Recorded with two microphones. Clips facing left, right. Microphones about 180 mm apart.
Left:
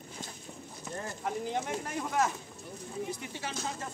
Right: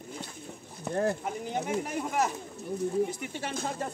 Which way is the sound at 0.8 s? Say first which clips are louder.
Right 12 dB; 60° right (ahead or behind).